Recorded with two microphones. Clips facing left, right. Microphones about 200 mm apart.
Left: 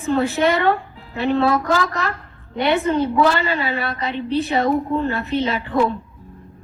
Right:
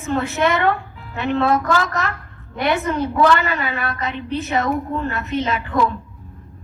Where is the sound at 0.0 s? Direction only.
35° left (ahead or behind).